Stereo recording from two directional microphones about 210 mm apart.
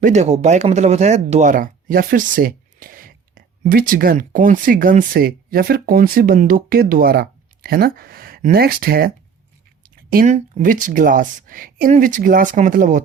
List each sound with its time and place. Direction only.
0.0 s speech: 35° right (ahead or behind)